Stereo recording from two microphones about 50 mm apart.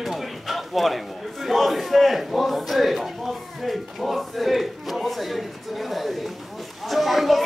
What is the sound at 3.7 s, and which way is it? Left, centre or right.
Battle cry, centre.